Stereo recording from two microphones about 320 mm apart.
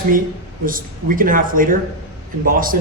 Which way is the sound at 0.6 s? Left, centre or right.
Right.